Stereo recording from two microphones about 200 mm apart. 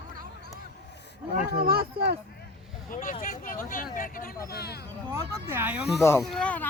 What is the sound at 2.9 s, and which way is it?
Speech, 45° left (ahead or behind).